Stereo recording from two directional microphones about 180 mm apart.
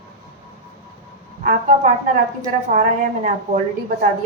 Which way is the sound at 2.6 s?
45° right (ahead or behind).